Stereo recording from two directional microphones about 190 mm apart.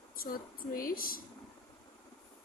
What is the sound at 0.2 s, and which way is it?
A woman's voice, 50° left (ahead or behind).